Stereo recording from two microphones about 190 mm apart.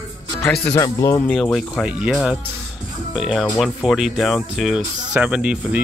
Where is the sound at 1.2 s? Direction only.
Centre (ahead or behind).